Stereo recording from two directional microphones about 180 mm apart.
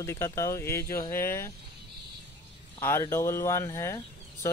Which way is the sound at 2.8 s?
15° left (ahead or behind).